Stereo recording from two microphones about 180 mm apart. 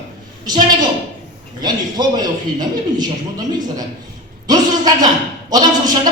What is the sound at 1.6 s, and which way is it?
A man's voice, 20° right (ahead or behind).